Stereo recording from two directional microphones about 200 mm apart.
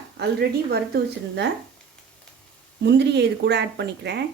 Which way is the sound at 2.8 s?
60° right (ahead or behind).